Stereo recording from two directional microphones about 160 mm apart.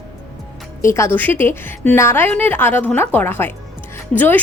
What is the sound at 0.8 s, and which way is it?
A woman's voice, 15° left (ahead or behind).